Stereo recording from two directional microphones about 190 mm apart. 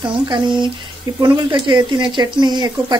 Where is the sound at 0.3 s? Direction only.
25° right (ahead or behind).